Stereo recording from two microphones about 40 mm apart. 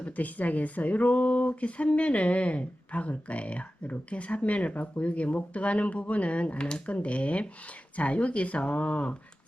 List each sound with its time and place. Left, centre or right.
0.0 s speech: left